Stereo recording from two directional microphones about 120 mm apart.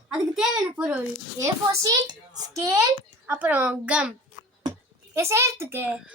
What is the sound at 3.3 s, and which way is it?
Speech, 15° right (ahead or behind).